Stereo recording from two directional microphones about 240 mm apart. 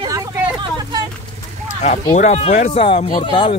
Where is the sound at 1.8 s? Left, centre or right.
Left.